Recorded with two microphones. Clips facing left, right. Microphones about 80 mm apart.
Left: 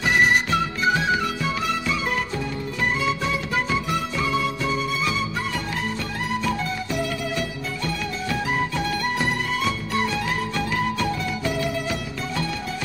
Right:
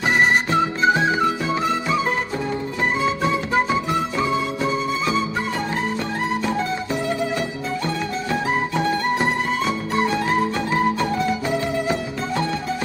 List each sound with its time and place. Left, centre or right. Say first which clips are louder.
0.5 s music: right 4 dB; right
3.0 s music: right 4 dB; right
7.8 s music: right 1 dB; right